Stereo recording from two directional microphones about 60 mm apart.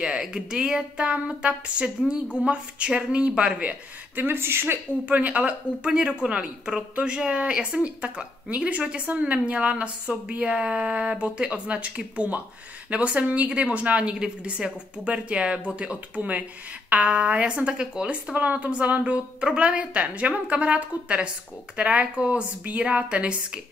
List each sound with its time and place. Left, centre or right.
0.0 s speech: centre
4.2 s speech: right
5.0 s speech: right